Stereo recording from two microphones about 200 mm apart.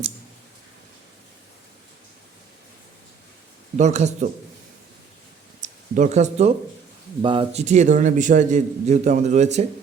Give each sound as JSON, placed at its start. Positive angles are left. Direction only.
{"t": 3.8, "sound": "a man's voice", "side_deg": -35}
{"t": 5.5, "sound": "a sound", "side_deg": -40}
{"t": 7.2, "sound": "a man's voice", "side_deg": -25}